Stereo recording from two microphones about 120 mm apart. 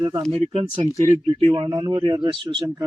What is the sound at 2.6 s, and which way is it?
Speech, 30° right (ahead or behind).